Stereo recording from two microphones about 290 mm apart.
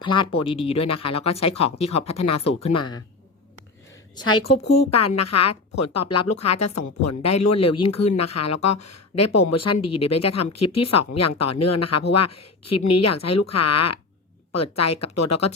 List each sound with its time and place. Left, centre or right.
0.0 s speech: centre
4.2 s a woman's voice: left